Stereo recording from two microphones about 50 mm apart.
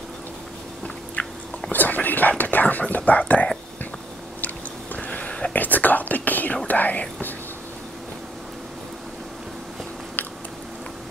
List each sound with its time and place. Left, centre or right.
1.2 s dog: left
1.7 s speech: left
4.9 s a sound: left
5.5 s whispering: left
6.7 s speech: left